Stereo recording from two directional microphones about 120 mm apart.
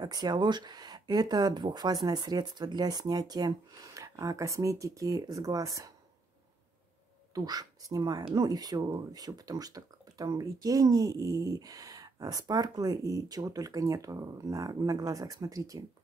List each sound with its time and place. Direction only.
0.0 s speech: 35° right (ahead or behind)
7.3 s speech: 30° right (ahead or behind)